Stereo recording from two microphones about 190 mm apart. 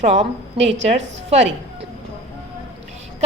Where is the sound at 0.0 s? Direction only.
35° right (ahead or behind).